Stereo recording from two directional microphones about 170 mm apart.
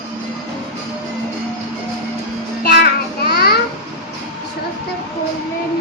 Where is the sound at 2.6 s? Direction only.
70° left (ahead or behind).